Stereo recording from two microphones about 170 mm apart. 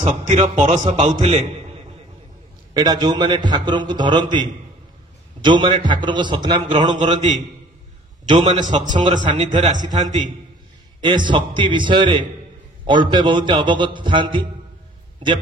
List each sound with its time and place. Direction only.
0.1 s a man's voice: 45° right (ahead or behind)
2.7 s a man's voice: 25° right (ahead or behind)
7.2 s a man's voice: 45° right (ahead or behind)
8.6 s a man's voice: 45° right (ahead or behind)
9.0 s a man's voice: 30° right (ahead or behind)
9.5 s a man's voice: 45° right (ahead or behind)
11.0 s a man's voice: 25° right (ahead or behind)